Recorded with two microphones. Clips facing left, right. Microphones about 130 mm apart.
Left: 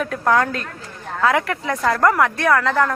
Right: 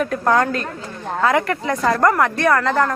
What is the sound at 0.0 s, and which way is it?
A woman's voice, centre (ahead or behind).